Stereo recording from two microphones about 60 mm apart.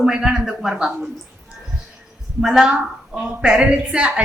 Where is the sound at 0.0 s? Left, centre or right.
Centre.